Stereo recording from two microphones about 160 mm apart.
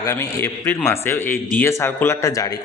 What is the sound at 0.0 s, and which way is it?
Speech, 20° left (ahead or behind).